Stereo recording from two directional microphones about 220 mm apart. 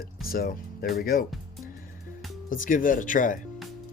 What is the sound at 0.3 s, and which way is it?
Speech, 40° left (ahead or behind).